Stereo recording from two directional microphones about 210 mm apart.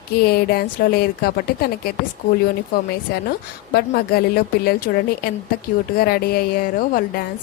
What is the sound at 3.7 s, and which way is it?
Speech, 45° left (ahead or behind).